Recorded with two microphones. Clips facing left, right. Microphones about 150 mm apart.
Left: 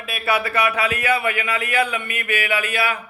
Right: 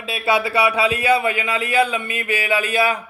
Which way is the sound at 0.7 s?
25° right (ahead or behind).